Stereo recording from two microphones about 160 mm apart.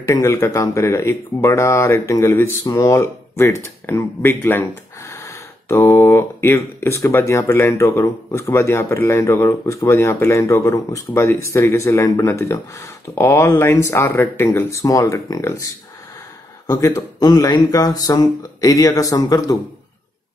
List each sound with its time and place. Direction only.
0.0 s speech: 20° left (ahead or behind)
16.6 s speech: 20° left (ahead or behind)